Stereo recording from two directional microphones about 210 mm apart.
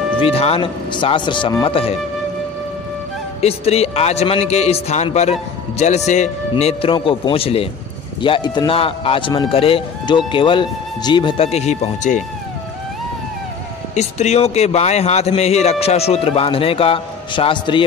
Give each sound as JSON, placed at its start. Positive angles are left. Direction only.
{"t": 0.2, "sound": "speech", "side_deg": 25}
{"t": 3.3, "sound": "speech", "side_deg": 30}
{"t": 13.9, "sound": "speech", "side_deg": 30}